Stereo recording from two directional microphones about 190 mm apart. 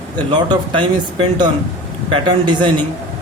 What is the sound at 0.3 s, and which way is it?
Speech, 25° right (ahead or behind).